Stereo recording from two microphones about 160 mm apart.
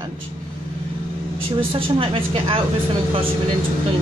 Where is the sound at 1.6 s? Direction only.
35° right (ahead or behind).